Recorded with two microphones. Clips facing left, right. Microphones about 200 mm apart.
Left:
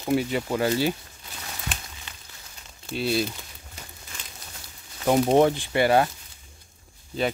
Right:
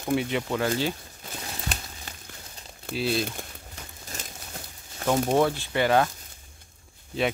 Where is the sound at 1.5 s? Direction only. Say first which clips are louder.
Right 2 dB; 40° right (ahead or behind).